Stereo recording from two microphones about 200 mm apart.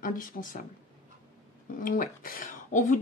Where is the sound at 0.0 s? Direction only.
40° left (ahead or behind).